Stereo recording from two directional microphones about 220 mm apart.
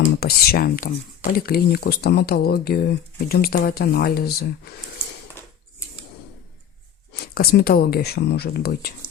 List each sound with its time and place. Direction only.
0.2 s speech: 45° left (ahead or behind)
7.1 s speech: 45° left (ahead or behind)